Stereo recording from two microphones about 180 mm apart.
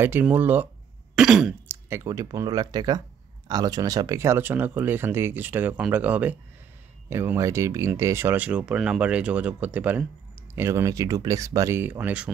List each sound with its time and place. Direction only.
0.0 s speech: 10° right (ahead or behind)
1.1 s throat clearing: 5° right (ahead or behind)
1.7 s speech: 15° right (ahead or behind)